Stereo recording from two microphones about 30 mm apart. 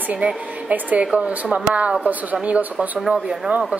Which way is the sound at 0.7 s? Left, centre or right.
Right.